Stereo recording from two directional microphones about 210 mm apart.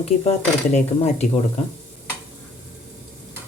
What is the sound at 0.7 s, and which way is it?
Speech, 30° left (ahead or behind).